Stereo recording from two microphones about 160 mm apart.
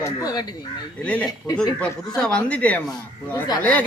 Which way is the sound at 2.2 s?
5° left (ahead or behind).